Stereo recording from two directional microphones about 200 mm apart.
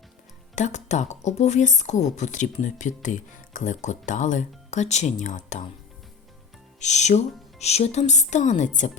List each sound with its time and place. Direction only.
0.5 s a woman's voice: 35° left (ahead or behind)
6.7 s a woman's voice: 35° left (ahead or behind)